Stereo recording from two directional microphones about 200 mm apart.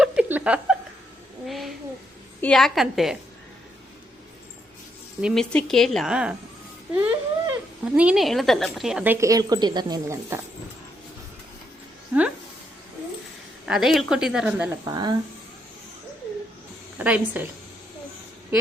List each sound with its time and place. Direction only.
0.0 s a sound: 5° right (ahead or behind)
2.4 s a woman's voice: 5° left (ahead or behind)
5.2 s a woman's voice: centre (ahead or behind); by 10.4 s 15° right (ahead or behind)
13.7 s a woman's voice: centre (ahead or behind)
14.8 s speech: 20° right (ahead or behind)
17.0 s a woman's voice: 5° right (ahead or behind)